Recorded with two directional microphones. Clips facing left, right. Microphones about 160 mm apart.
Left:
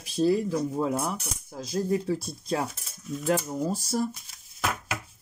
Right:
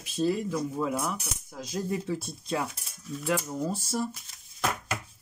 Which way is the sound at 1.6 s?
35° left (ahead or behind).